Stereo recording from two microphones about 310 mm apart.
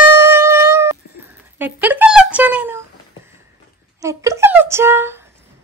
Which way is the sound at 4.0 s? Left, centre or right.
Centre.